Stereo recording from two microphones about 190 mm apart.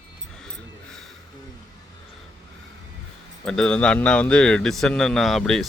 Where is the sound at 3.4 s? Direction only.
5° left (ahead or behind).